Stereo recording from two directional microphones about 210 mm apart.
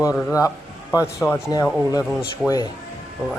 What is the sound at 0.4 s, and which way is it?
Speech, 15° left (ahead or behind).